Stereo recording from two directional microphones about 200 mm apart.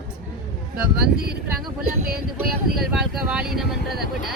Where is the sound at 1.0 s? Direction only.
50° right (ahead or behind).